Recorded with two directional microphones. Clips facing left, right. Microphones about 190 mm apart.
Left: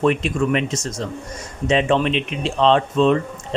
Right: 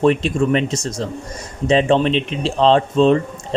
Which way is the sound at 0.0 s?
30° right (ahead or behind).